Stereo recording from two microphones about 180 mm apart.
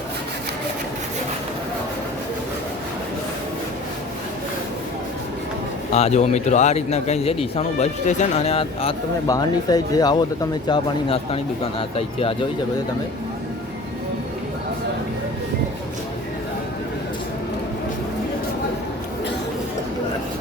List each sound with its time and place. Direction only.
5.9 s speech: 40° left (ahead or behind)
9.2 s speech: 20° left (ahead or behind)
10.7 s speech: 30° left (ahead or behind)